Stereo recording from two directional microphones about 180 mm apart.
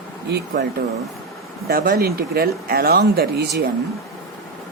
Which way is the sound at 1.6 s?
60° right (ahead or behind).